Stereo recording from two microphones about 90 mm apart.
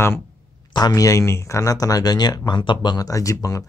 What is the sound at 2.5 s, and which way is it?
Speech, 60° left (ahead or behind).